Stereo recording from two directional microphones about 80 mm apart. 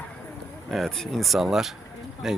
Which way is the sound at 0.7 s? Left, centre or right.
Centre.